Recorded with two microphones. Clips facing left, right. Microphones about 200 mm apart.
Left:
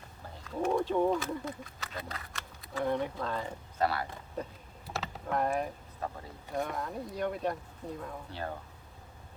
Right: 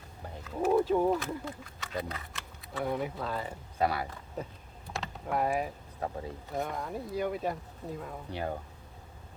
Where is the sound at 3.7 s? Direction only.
15° right (ahead or behind).